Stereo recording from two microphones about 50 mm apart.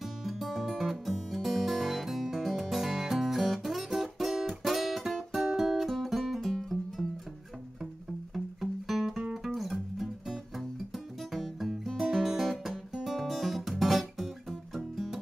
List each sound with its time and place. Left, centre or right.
0.0 s music: centre
8.5 s music: centre
12.9 s guitar: centre